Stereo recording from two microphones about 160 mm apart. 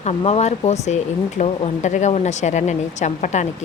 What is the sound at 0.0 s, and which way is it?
Speech, 40° left (ahead or behind).